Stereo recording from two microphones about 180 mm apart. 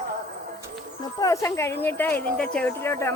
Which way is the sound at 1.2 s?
20° left (ahead or behind).